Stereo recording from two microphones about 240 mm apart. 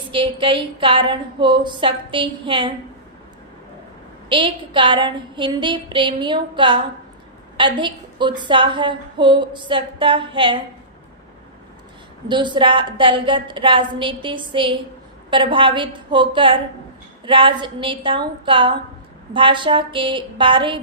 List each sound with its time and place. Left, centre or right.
0.1 s a woman's voice: right
4.3 s a woman's voice: right
12.3 s a woman's voice: centre